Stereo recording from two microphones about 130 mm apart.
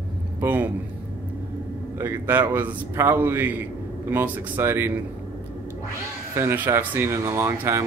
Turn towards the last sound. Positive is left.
turn(degrees=-20)  # may be behind; listen again after turning